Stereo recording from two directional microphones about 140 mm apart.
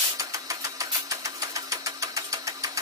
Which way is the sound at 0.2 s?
25° right (ahead or behind).